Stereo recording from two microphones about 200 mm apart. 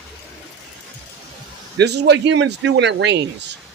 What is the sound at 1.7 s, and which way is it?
Speech, 55° right (ahead or behind).